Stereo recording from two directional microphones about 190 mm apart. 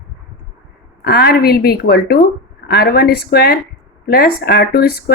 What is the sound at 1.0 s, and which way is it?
A woman's voice, 55° left (ahead or behind).